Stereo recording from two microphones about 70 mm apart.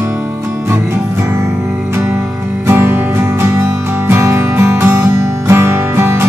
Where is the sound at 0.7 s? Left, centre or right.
Right.